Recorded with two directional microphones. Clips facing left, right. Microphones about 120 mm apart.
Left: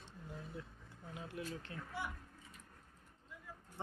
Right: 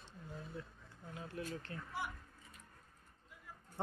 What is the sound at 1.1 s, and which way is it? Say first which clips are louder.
Speech: right 1 dB; 15° left (ahead or behind).